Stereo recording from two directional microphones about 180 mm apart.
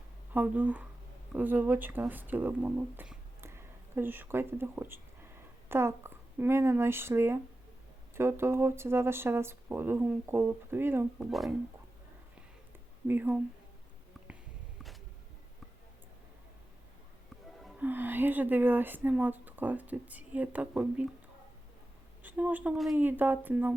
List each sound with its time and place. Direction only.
0.3 s speech: 10° right (ahead or behind)
11.3 s speech: centre (ahead or behind)
13.1 s speech: 10° right (ahead or behind)
17.6 s speech: 10° right (ahead or behind)
22.2 s speech: 10° right (ahead or behind)